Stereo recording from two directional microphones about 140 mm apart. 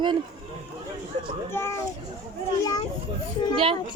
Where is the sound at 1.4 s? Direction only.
15° left (ahead or behind).